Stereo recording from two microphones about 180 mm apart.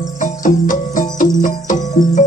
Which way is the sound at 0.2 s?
45° left (ahead or behind).